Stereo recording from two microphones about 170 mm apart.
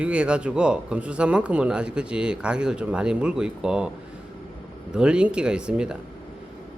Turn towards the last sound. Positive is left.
turn(degrees=-5)  # may be behind; listen again after turning